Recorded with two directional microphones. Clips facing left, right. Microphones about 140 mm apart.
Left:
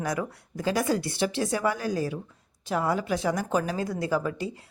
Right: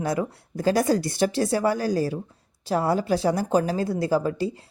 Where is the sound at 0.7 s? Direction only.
40° right (ahead or behind).